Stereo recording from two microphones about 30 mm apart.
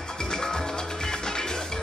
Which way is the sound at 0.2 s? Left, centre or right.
Left.